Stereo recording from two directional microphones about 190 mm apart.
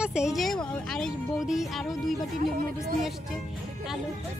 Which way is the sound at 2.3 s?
50° right (ahead or behind).